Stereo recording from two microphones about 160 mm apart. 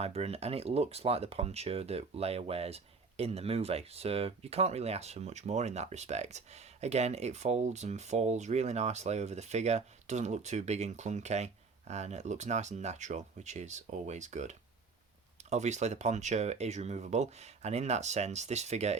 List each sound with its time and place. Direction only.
0.0 s speech: 40° right (ahead or behind)